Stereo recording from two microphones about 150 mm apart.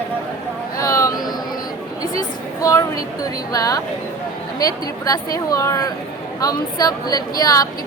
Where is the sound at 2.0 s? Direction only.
25° left (ahead or behind).